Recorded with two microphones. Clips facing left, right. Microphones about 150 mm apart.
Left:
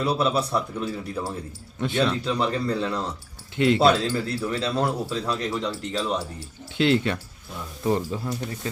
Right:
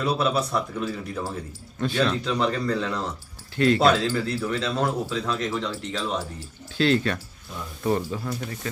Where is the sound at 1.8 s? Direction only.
20° left (ahead or behind).